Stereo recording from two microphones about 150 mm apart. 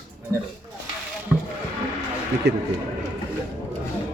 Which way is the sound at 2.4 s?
90° right.